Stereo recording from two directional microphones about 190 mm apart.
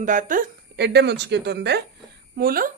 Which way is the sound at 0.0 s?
40° right (ahead or behind).